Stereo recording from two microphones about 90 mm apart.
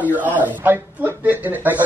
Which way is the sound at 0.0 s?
20° right (ahead or behind).